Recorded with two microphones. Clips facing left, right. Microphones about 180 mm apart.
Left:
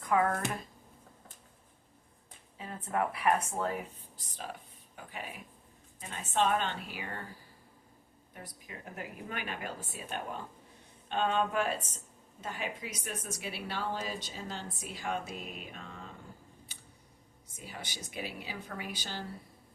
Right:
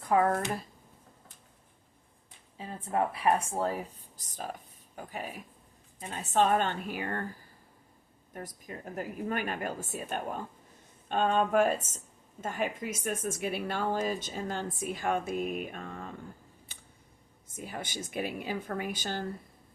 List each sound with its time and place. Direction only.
0.0 s speech: 30° right (ahead or behind)
2.6 s speech: 30° right (ahead or behind)
4.9 s a woman's voice: 40° right (ahead or behind)
8.3 s a woman's voice: 45° right (ahead or behind)
17.5 s a woman's voice: 50° right (ahead or behind)